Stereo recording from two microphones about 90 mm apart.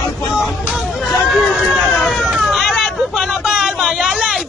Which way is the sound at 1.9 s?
5° left (ahead or behind).